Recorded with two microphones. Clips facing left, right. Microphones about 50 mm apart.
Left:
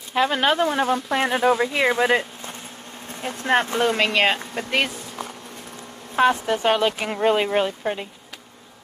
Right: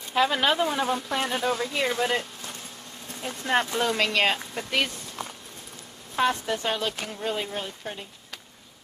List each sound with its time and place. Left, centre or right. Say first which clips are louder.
0.1 s speech: left 3 dB; centre
1.1 s speech: left 10 dB; left
1.6 s speech: left 6 dB; left
6.1 s speech: left 6 dB; left
6.7 s speech: left 9 dB; left
7.8 s speech: left 10 dB; left